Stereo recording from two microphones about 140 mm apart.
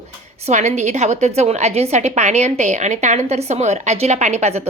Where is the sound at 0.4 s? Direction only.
50° right (ahead or behind).